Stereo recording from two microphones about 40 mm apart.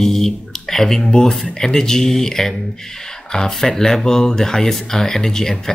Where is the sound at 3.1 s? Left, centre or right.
Centre.